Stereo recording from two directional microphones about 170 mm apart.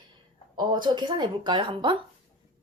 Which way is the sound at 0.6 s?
25° right (ahead or behind).